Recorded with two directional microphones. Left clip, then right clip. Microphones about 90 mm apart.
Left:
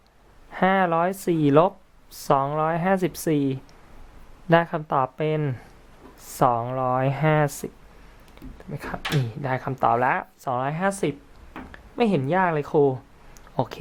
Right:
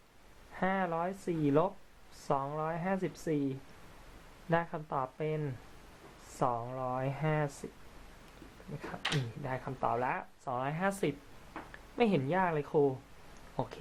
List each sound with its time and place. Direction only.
0.5 s speech: 40° left (ahead or behind)
8.7 s speech: 50° left (ahead or behind)
9.4 s speech: 40° left (ahead or behind)